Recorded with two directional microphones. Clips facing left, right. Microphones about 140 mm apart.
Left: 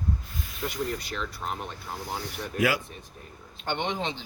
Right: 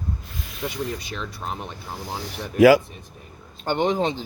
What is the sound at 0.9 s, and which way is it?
Speech, 15° right (ahead or behind).